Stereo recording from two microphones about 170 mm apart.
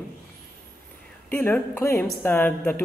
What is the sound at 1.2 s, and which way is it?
A woman's voice, 10° left (ahead or behind).